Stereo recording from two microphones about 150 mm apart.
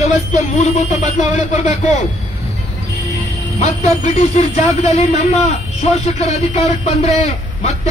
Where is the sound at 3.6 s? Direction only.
50° left (ahead or behind).